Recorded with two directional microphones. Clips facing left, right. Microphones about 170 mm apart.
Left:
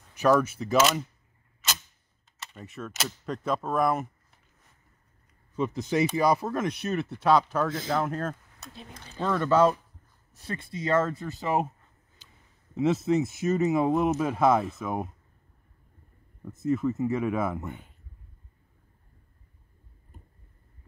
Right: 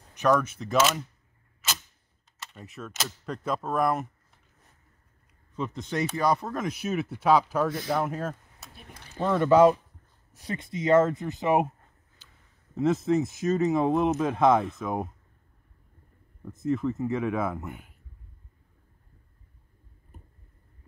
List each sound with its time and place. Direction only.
0.1 s speech: 5° left (ahead or behind)
2.3 s speech: centre (ahead or behind)
5.6 s speech: 5° left (ahead or behind); by 11.7 s 15° right (ahead or behind)
12.2 s a sound: 15° left (ahead or behind)
12.7 s speech: 5° left (ahead or behind)
16.7 s speech: 5° left (ahead or behind)